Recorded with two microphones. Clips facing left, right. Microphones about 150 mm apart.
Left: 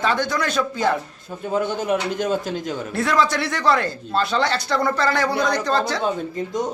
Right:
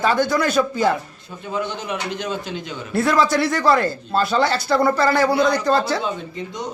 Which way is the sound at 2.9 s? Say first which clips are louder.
Right 3 dB; 5° right (ahead or behind).